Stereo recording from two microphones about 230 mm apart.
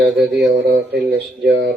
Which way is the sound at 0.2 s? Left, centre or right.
Right.